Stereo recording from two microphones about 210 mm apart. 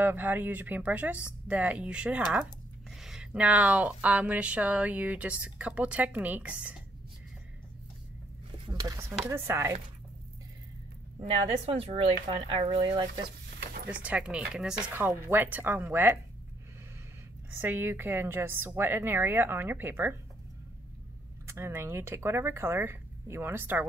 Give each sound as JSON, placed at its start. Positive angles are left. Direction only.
{"t": 0.0, "sound": "speech", "side_deg": -10}
{"t": 8.6, "sound": "speech", "side_deg": -20}
{"t": 11.1, "sound": "speech", "side_deg": -30}
{"t": 14.0, "sound": "speech", "side_deg": -5}
{"t": 17.5, "sound": "speech", "side_deg": -10}
{"t": 21.5, "sound": "speech", "side_deg": -10}